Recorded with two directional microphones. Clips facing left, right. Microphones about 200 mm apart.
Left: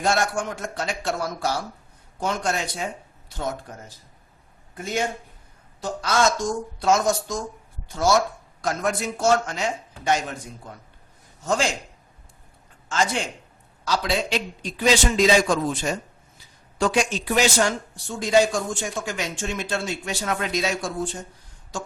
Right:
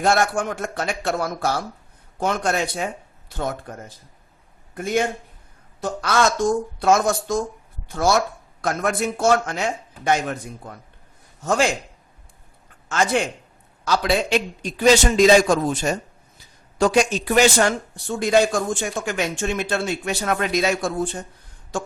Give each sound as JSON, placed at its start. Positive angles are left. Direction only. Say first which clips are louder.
{"t": 0.0, "sound": "a man's voice", "louder": "right 3 dB", "side_deg": -55}
{"t": 4.7, "sound": "a man's voice", "louder": "right 5 dB", "side_deg": -55}
{"t": 11.4, "sound": "speech", "louder": "right 3 dB", "side_deg": -60}
{"t": 13.8, "sound": "a man's voice", "louder": "right 4 dB", "side_deg": -55}